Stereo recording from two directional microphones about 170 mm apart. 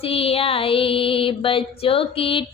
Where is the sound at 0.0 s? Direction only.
35° left (ahead or behind).